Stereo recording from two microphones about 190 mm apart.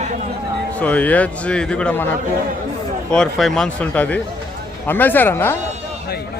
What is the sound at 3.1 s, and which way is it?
A man's voice, centre (ahead or behind).